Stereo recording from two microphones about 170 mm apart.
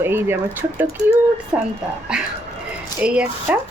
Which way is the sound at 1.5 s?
10° right (ahead or behind).